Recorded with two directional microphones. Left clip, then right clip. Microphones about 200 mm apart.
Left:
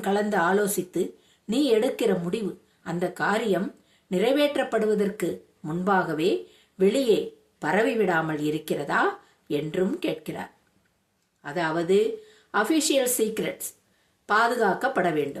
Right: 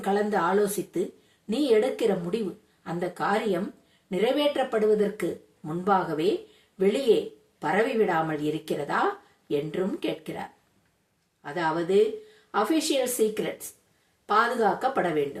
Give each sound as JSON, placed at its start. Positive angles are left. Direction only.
{"t": 0.0, "sound": "speech", "side_deg": 25}
{"t": 11.4, "sound": "speech", "side_deg": 25}